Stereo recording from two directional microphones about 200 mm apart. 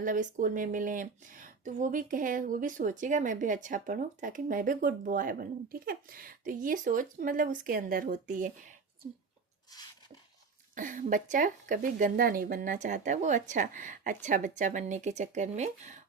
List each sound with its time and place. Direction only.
0.0 s speech: 40° right (ahead or behind)
10.8 s speech: 40° right (ahead or behind)